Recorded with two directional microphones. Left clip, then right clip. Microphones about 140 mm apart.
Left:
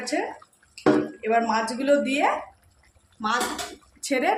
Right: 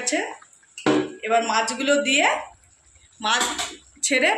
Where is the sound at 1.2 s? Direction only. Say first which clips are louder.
Right 3 dB; 90° left.